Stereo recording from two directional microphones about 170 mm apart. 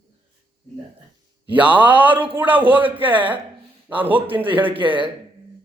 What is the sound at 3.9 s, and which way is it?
Speech, 10° right (ahead or behind).